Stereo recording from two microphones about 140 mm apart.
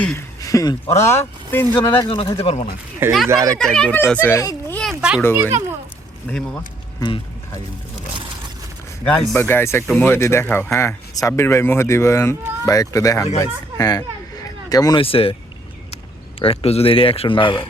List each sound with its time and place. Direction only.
0.4 s speech: 25° left (ahead or behind)
2.0 s speech: 40° left (ahead or behind)
3.2 s a child's voice: 20° right (ahead or behind)
3.6 s speech: 5° left (ahead or behind)
4.7 s a sound: 5° left (ahead or behind)
4.9 s a child's voice: 5° right (ahead or behind)
6.2 s speech: 10° left (ahead or behind)
7.0 s speech: 30° left (ahead or behind)
9.0 s speech: 5° left (ahead or behind); by 15.0 s 25° left (ahead or behind)
15.0 s speech: 40° left (ahead or behind)
16.4 s speech: 40° left (ahead or behind)